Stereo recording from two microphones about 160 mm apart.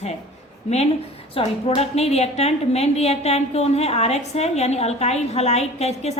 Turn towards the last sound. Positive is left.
turn(degrees=40)  # may be behind; listen again after turning